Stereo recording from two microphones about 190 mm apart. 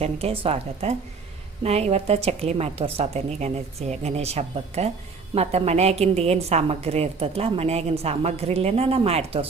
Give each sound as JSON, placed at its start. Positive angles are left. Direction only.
{"t": 0.0, "sound": "a woman's voice", "side_deg": -30}